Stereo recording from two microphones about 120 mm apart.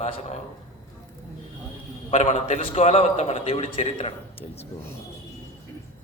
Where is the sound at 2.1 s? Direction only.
90° left.